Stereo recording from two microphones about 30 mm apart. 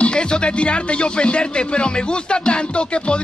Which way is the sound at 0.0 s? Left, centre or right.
Left.